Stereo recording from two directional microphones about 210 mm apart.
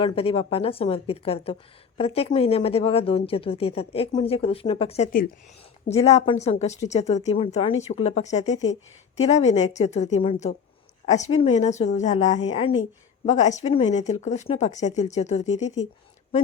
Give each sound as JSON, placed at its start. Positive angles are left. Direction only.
{"t": 0.0, "sound": "speech", "side_deg": 25}